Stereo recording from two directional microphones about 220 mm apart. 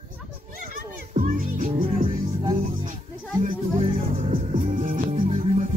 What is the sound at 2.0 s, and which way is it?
Music, 20° right (ahead or behind).